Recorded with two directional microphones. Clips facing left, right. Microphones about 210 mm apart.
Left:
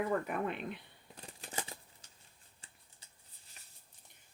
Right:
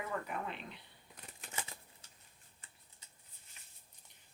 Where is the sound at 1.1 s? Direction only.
30° left (ahead or behind).